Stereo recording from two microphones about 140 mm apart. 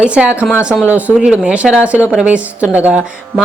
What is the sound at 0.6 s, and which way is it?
Speech, 10° right (ahead or behind).